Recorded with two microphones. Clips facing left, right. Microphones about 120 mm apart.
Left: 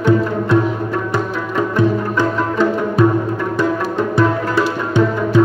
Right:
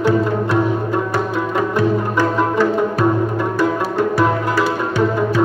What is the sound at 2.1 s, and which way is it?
Music, 20° left (ahead or behind).